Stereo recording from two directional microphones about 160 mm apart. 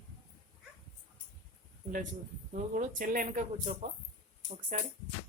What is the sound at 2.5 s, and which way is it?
Speech, 55° right (ahead or behind).